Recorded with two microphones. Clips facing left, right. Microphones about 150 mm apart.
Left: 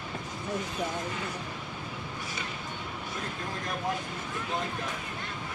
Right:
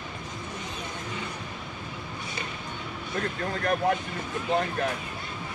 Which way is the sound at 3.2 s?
75° right (ahead or behind).